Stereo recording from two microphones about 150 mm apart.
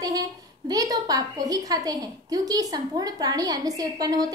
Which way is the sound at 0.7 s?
25° right (ahead or behind).